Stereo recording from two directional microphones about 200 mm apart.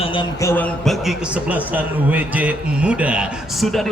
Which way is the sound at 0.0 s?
25° left (ahead or behind).